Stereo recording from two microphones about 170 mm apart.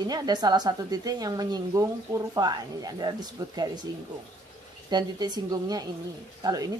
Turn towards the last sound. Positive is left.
turn(degrees=-20)  # may be behind; listen again after turning